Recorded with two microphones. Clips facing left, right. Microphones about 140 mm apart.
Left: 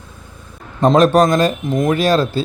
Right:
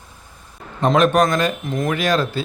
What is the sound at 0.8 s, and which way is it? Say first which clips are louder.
Speech: left 4 dB; 35° left (ahead or behind).